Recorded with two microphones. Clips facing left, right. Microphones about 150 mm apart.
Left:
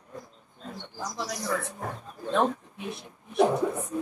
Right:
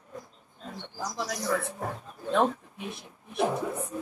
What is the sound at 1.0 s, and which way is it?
Speech, centre (ahead or behind).